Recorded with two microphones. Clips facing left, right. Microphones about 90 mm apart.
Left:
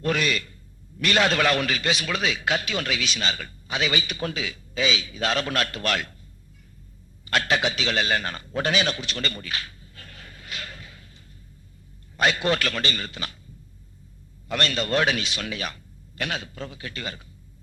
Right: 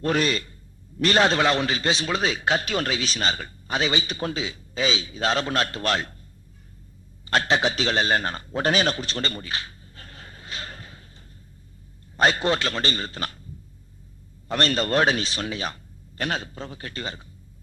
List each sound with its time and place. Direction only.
0.0 s a man's voice: 35° right (ahead or behind)
7.3 s a man's voice: 30° right (ahead or behind)
14.4 s a man's voice: 35° right (ahead or behind)